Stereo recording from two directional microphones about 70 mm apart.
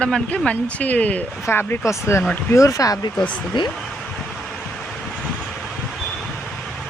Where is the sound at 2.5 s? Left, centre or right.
Left.